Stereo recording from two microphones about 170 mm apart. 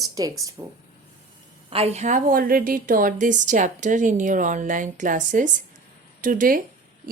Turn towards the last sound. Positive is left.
turn(degrees=-50)  # may be behind; listen again after turning